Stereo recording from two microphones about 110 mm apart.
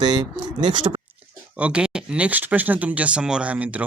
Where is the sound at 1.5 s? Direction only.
10° right (ahead or behind).